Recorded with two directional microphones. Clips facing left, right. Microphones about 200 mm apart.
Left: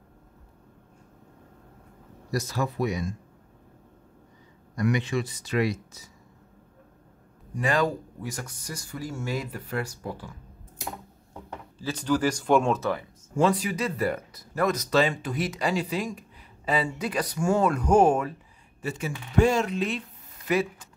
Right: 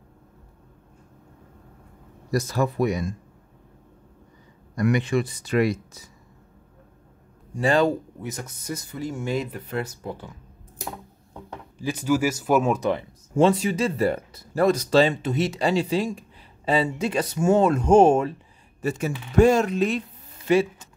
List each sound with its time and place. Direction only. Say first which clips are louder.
2.3 s speech: right 5 dB; 50° right (ahead or behind)
4.7 s speech: right 4 dB; 55° right (ahead or behind)
7.5 s speech: right 5 dB; 25° right (ahead or behind)
11.8 s speech: right 2 dB; 10° right (ahead or behind)
12.8 s speech: right 4 dB; 25° right (ahead or behind)
18.8 s speech: right 6 dB; 45° right (ahead or behind)
20.4 s mechanisms: right 5 dB; 25° right (ahead or behind)